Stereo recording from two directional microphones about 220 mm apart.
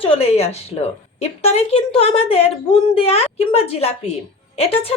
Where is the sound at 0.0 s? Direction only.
25° left (ahead or behind).